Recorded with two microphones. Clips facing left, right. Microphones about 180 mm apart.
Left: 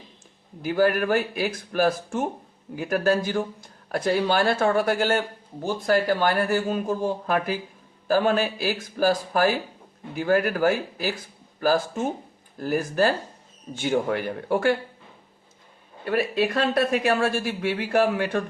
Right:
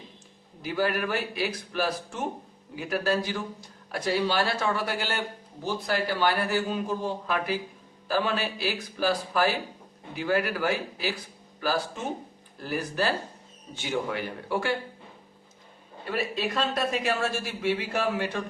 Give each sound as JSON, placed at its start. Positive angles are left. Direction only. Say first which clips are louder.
{"t": 0.6, "sound": "a man's voice", "louder": "left 6 dB", "side_deg": 50}
{"t": 16.0, "sound": "a man's voice", "louder": "left 6 dB", "side_deg": 55}